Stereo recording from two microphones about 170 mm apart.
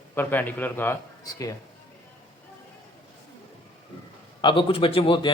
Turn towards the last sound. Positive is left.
turn(degrees=30)  # may be behind; listen again after turning